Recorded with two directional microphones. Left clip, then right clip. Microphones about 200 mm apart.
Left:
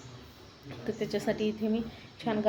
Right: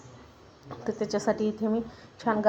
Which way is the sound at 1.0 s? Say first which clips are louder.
Right 5 dB; centre (ahead or behind).